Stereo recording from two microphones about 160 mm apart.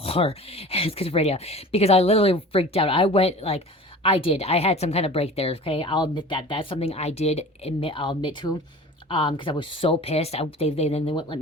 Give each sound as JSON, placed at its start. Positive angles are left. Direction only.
{"t": 0.0, "sound": "speech", "side_deg": 35}